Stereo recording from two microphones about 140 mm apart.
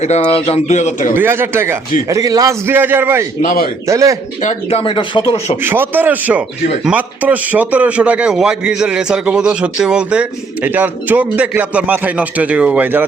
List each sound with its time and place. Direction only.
0.0 s speech: 50° left (ahead or behind)
1.1 s a man's voice: 15° right (ahead or behind)
3.4 s a man's voice: 90° left
3.8 s a man's voice: 20° right (ahead or behind)
4.4 s speech: 40° left (ahead or behind)
5.6 s a man's voice: 15° right (ahead or behind)